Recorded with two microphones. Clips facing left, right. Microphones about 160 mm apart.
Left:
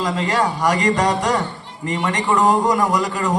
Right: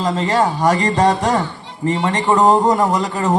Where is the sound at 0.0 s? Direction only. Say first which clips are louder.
Right 3 dB; 25° right (ahead or behind).